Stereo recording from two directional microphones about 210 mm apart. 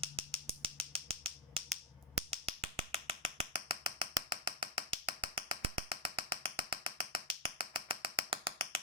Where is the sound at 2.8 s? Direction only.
25° right (ahead or behind).